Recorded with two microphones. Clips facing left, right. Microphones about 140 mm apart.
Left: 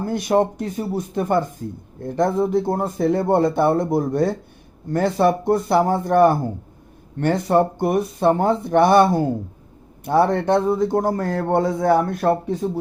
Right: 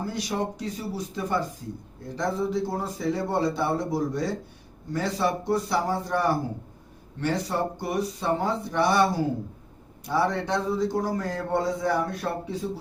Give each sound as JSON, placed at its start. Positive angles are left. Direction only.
{"t": 0.0, "sound": "a man's voice", "side_deg": 55}